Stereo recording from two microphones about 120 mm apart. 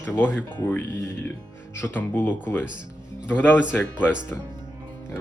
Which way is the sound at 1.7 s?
15° left (ahead or behind).